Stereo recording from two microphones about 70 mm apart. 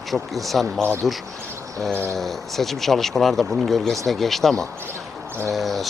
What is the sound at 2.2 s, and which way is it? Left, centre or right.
Speech, centre.